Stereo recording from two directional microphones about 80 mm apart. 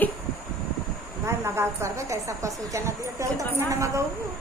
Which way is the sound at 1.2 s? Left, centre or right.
Right.